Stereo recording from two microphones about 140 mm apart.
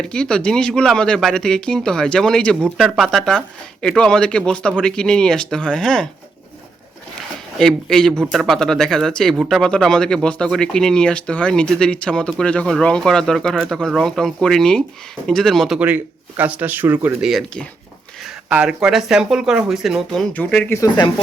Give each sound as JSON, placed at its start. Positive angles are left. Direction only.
{"t": 0.0, "sound": "speech", "side_deg": 5}
{"t": 7.2, "sound": "a sound", "side_deg": 5}
{"t": 8.3, "sound": "speech", "side_deg": 0}
{"t": 16.4, "sound": "speech", "side_deg": -10}
{"t": 17.2, "sound": "speech", "side_deg": 5}
{"t": 18.4, "sound": "speech", "side_deg": -10}
{"t": 20.7, "sound": "speech", "side_deg": 25}